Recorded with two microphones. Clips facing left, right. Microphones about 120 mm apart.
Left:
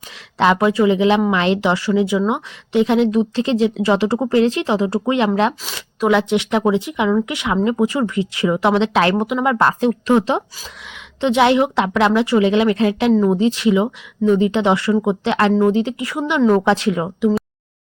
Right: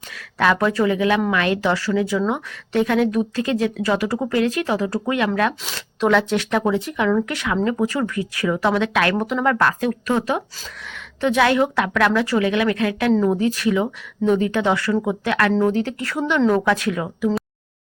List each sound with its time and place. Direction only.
0.5 s speech: 15° left (ahead or behind)
5.6 s speech: 5° left (ahead or behind); by 9.2 s 25° left (ahead or behind)
9.2 s speech: 15° left (ahead or behind)
9.6 s speech: 25° left (ahead or behind)
16.6 s speech: 25° left (ahead or behind)